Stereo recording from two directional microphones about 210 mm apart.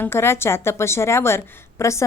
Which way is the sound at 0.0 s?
10° left (ahead or behind).